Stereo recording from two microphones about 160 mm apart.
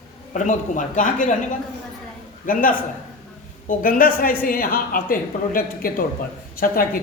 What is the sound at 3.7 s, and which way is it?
Speech, 60° left (ahead or behind).